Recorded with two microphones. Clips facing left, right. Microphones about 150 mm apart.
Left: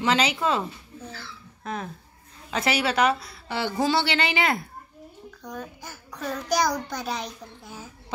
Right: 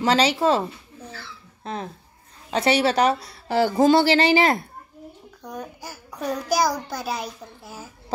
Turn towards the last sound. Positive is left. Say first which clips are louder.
# right 2 dB
turn(degrees=-5)  # may be behind; listen again after turning